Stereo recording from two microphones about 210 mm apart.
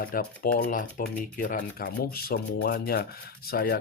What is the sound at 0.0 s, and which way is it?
Speech, 45° left (ahead or behind).